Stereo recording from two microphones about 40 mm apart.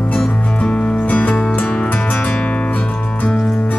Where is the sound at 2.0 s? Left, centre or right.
Left.